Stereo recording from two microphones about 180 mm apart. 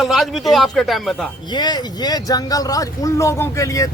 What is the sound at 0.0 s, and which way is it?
Speech, centre (ahead or behind).